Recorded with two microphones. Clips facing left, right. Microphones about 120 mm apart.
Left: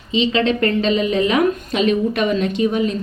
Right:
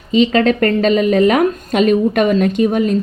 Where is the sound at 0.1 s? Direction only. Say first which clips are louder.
Right 5 dB; 45° right (ahead or behind).